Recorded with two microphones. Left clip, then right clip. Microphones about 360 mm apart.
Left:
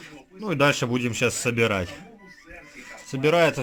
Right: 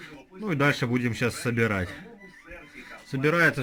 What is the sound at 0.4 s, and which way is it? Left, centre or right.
A man's voice, centre.